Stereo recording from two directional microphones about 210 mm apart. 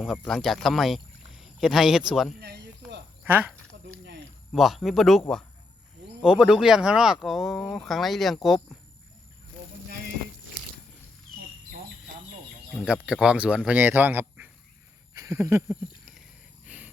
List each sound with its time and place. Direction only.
0.0 s speech: centre (ahead or behind)
2.4 s a sound: 50° right (ahead or behind)
3.2 s speech: 10° right (ahead or behind)
4.5 s speech: centre (ahead or behind)
6.2 s speech: 5° right (ahead or behind)
12.8 s speech: 5° right (ahead or behind)
15.1 s a sound: 15° right (ahead or behind)